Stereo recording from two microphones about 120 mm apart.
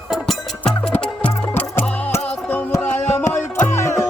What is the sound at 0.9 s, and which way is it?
Music, 15° left (ahead or behind).